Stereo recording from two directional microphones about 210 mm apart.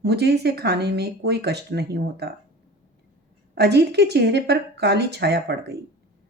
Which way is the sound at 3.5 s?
50° right (ahead or behind).